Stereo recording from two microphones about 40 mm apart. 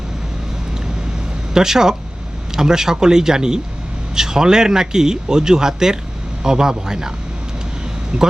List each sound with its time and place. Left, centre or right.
1.5 s speech: centre
8.1 s speech: right